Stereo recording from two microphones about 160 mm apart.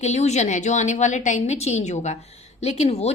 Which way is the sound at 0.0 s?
45° left (ahead or behind).